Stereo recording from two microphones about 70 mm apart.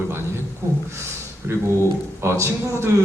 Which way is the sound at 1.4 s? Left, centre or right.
Right.